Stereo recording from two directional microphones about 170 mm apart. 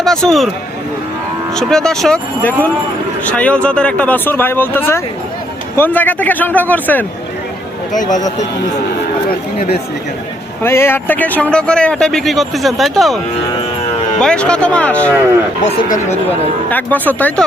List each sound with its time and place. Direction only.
0.0 s a man's voice: centre (ahead or behind)
1.5 s a man's voice: 5° left (ahead or behind)
10.6 s a man's voice: 15° left (ahead or behind)
14.2 s speech: 5° left (ahead or behind)
16.6 s speech: 10° left (ahead or behind)